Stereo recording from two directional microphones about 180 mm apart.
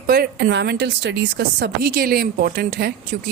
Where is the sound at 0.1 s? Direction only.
55° right (ahead or behind).